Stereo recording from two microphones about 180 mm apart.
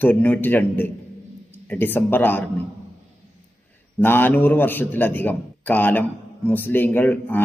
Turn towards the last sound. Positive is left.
turn(degrees=10)  # may be behind; listen again after turning